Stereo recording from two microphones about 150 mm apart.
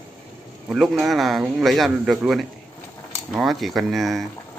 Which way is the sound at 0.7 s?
Centre (ahead or behind).